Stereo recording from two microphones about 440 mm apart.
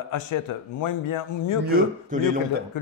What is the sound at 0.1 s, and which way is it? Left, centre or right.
A man's voice, left.